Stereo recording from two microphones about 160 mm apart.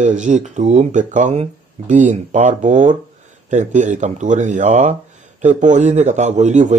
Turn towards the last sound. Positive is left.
turn(degrees=-45)  # may be behind; listen again after turning